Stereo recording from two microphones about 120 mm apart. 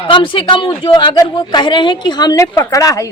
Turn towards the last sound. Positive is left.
turn(degrees=30)  # may be behind; listen again after turning